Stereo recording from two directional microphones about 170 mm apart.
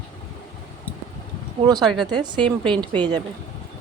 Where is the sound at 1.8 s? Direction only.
Centre (ahead or behind).